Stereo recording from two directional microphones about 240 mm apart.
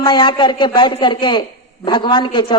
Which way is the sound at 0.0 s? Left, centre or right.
Centre.